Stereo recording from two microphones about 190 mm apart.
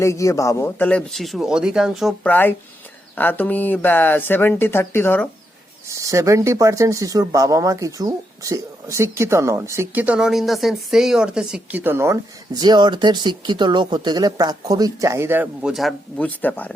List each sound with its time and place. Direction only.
0.0 s speech: 15° left (ahead or behind)
5.9 s speech: 15° right (ahead or behind); by 16.7 s 10° left (ahead or behind)